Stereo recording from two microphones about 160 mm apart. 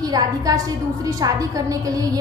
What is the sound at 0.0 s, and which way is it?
A woman's voice, 25° right (ahead or behind).